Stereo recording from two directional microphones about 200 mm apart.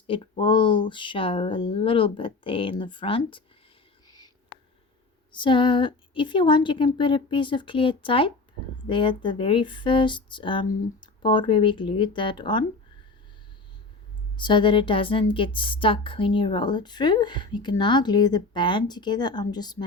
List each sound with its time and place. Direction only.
0.1 s a woman's voice: 25° left (ahead or behind)
5.3 s a woman's voice: 25° left (ahead or behind)
14.3 s a woman's voice: 25° left (ahead or behind)